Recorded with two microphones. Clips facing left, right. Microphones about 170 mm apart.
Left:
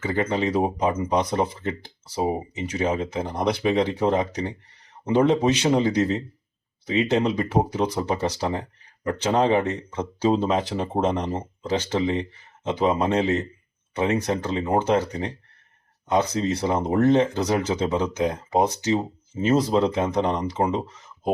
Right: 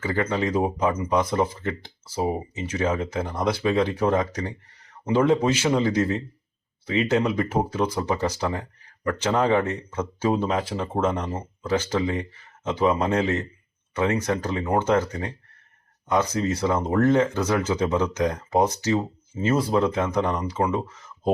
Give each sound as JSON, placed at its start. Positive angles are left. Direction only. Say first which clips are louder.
{"t": 0.0, "sound": "speech", "louder": "left 1 dB", "side_deg": 20}
{"t": 16.3, "sound": "speech", "louder": "even", "side_deg": 15}